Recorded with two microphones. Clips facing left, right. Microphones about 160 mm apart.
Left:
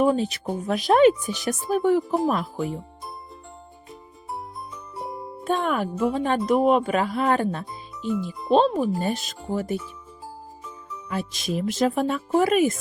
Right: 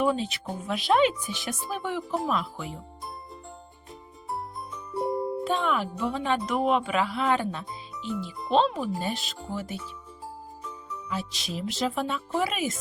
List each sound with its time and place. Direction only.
0.0 s speech: 45° left (ahead or behind)
4.3 s jingle: centre (ahead or behind)
5.5 s music: 45° left (ahead or behind)
6.0 s speech: 45° left (ahead or behind)
11.1 s speech: 50° left (ahead or behind)